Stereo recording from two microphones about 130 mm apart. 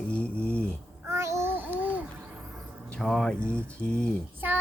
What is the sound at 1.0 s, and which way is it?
Babbling, 20° right (ahead or behind).